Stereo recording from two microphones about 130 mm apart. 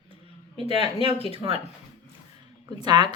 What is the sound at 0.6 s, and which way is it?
Speech, 50° left (ahead or behind).